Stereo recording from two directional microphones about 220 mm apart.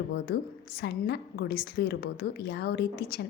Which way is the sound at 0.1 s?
45° left (ahead or behind).